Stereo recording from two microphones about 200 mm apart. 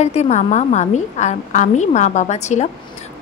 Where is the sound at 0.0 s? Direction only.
35° left (ahead or behind).